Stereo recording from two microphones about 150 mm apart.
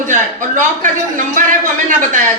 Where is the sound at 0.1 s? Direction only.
60° right (ahead or behind).